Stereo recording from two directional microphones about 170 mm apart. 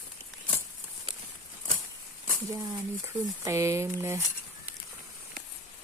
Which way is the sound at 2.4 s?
15° right (ahead or behind).